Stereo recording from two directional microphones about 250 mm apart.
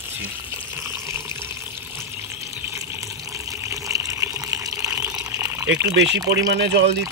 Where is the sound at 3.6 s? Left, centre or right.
Centre.